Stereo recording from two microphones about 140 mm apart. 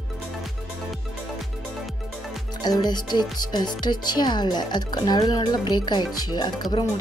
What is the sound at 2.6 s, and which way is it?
Speech, 30° left (ahead or behind).